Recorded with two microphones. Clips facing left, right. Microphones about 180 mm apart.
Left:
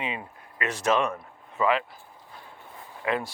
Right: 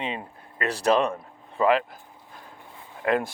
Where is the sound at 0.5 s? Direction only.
35° right (ahead or behind).